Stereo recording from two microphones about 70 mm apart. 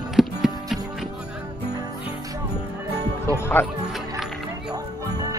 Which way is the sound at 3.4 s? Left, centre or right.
Left.